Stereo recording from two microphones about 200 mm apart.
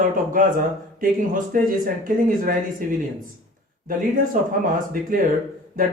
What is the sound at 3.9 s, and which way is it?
Speech, 45° right (ahead or behind).